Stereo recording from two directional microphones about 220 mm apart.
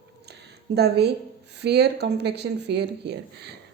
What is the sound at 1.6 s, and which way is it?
A woman's voice, 50° right (ahead or behind).